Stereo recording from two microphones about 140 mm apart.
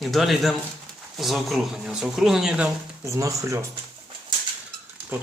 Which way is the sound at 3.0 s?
20° right (ahead or behind).